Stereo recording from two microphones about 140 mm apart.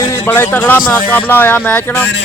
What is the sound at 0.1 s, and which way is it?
A man's voice, 15° left (ahead or behind).